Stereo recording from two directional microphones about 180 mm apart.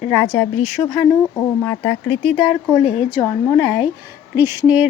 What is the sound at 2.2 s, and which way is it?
A woman's voice, centre (ahead or behind).